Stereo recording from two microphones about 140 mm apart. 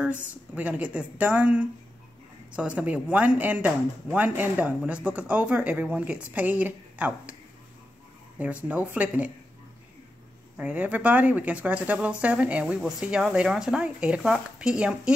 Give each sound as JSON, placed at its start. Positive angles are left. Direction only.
{"t": 0.0, "sound": "speech", "side_deg": -10}
{"t": 8.4, "sound": "speech", "side_deg": -10}
{"t": 10.6, "sound": "speech", "side_deg": -10}